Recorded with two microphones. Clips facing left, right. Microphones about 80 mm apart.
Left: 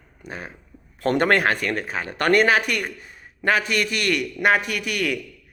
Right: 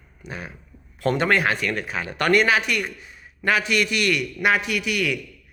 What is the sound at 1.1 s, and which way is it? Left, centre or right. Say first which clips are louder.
A man's voice: left 2 dB; left.